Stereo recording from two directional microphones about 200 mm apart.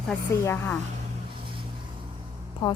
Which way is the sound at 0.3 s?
10° left (ahead or behind).